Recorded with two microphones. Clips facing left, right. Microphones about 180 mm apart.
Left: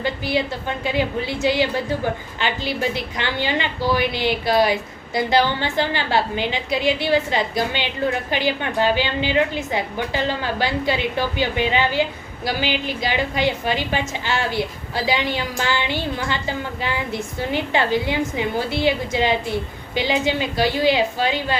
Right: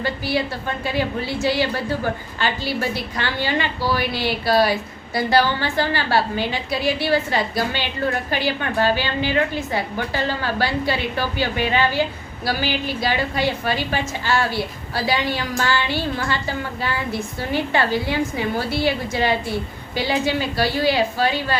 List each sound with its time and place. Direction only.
0.0 s a woman's voice: 20° left (ahead or behind)